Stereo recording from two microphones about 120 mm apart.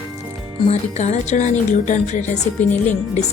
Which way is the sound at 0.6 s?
75° left (ahead or behind).